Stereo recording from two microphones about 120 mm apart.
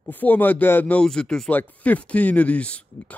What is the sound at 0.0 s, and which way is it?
Speech, 15° left (ahead or behind).